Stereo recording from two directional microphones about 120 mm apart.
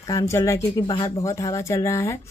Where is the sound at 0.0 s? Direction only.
25° left (ahead or behind).